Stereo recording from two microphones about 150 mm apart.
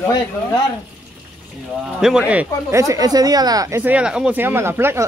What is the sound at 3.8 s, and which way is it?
Speech, 10° right (ahead or behind).